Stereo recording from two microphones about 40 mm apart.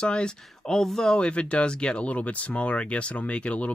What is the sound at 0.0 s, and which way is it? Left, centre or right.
Speech, left.